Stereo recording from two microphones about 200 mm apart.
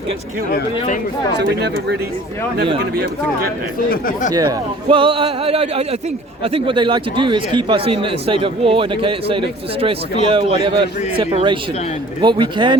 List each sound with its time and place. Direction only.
1.4 s speech: 55° right (ahead or behind)
3.8 s speech: 45° left (ahead or behind)
4.3 s a man's voice: 20° right (ahead or behind)